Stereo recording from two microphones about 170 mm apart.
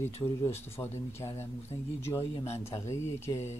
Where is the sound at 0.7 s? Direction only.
15° left (ahead or behind).